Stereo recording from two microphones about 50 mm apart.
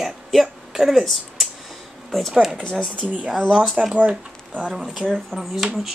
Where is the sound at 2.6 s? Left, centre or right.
Centre.